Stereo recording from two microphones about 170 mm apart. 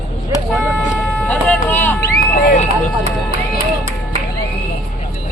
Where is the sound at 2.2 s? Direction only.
50° left (ahead or behind).